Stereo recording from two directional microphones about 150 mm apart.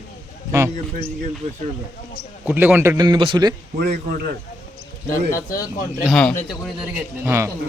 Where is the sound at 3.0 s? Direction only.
30° right (ahead or behind).